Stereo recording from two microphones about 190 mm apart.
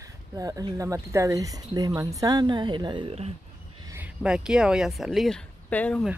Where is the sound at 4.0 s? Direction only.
5° right (ahead or behind).